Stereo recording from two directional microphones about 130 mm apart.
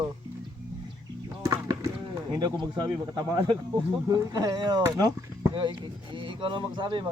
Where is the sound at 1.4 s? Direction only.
30° right (ahead or behind).